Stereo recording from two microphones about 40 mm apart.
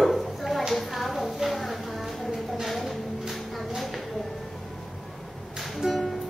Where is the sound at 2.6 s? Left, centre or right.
Centre.